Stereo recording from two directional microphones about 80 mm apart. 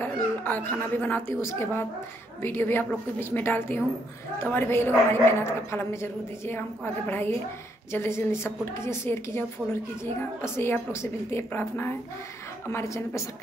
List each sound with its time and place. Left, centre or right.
0.0 s a child's voice: left